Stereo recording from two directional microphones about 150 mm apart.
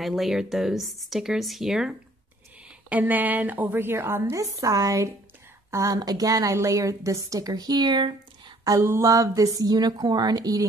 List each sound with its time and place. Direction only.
0.0 s a woman's voice: centre (ahead or behind); by 10.7 s 25° right (ahead or behind)